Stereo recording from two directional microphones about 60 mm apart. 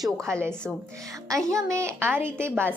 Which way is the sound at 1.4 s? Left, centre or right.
Right.